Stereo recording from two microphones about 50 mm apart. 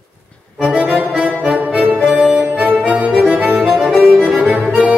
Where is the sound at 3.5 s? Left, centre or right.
Centre.